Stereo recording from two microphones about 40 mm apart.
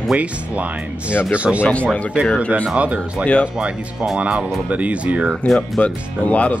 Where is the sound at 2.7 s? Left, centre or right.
Right.